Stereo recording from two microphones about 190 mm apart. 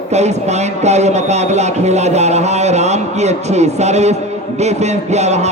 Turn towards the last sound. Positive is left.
turn(degrees=-35)  # may be behind; listen again after turning